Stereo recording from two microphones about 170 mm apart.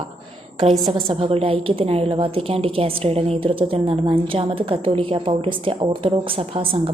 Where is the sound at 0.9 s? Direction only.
35° right (ahead or behind).